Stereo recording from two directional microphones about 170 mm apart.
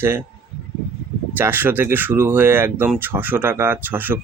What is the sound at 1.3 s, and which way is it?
Speech, 10° right (ahead or behind).